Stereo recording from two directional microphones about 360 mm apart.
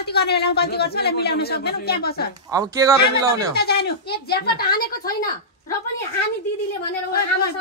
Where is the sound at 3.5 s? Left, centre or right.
Left.